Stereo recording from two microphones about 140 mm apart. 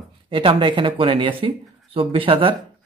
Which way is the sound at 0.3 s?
40° right (ahead or behind).